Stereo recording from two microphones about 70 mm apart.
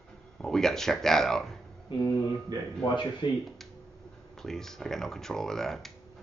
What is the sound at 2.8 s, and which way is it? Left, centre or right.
Speech, left.